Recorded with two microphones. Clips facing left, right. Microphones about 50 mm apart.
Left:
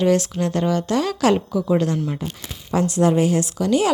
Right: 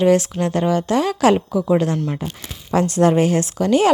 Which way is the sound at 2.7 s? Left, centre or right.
Right.